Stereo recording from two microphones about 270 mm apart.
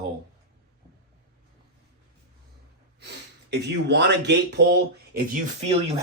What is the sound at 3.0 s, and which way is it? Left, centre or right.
Speech, right.